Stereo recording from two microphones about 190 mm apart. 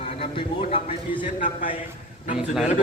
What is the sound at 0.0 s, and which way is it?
Speech, 30° left (ahead or behind).